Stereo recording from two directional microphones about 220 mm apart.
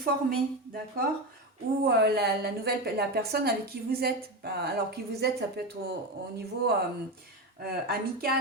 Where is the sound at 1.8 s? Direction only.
50° right (ahead or behind).